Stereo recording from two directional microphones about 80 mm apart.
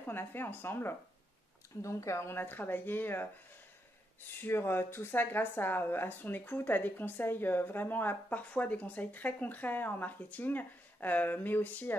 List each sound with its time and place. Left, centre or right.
0.0 s speech: left
1.8 s speech: left
4.4 s speech: left